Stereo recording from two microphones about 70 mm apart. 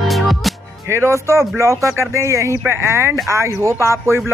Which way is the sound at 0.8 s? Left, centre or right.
Right.